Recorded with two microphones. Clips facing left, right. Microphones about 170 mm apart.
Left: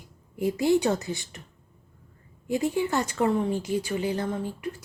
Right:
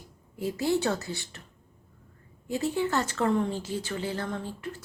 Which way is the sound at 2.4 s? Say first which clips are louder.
Left 2 dB; 15° left (ahead or behind).